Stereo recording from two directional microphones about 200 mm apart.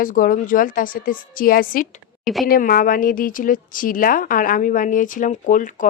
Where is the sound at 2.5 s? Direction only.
45° left (ahead or behind).